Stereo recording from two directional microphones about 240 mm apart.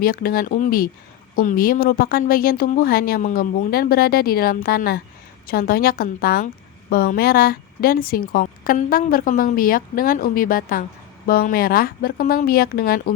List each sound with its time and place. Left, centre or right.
0.0 s a woman's voice: left